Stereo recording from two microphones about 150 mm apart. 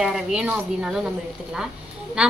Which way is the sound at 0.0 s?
5° right (ahead or behind).